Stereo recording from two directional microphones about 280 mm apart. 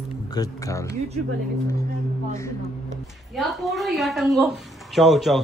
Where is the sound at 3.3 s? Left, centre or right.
Centre.